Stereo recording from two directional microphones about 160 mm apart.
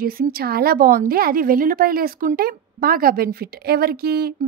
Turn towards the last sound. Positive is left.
turn(degrees=-75)  # may be behind; listen again after turning